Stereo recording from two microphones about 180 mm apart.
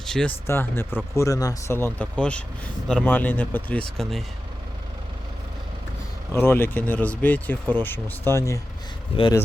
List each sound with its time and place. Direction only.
0.0 s speech: 5° left (ahead or behind)
6.3 s speech: 15° left (ahead or behind)
9.1 s speech: 30° left (ahead or behind)